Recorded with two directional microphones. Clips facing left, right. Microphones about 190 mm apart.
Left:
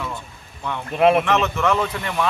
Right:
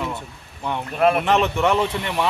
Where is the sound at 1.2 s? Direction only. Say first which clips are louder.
Right 1 dB; 30° right (ahead or behind).